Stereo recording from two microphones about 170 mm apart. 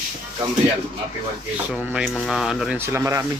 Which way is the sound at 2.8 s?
15° right (ahead or behind).